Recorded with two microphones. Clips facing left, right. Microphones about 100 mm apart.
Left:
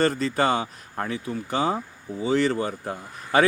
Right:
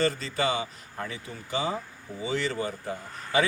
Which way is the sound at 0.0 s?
50° left (ahead or behind).